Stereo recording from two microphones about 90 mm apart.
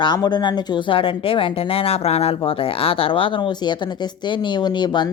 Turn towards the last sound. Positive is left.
turn(degrees=55)  # may be behind; listen again after turning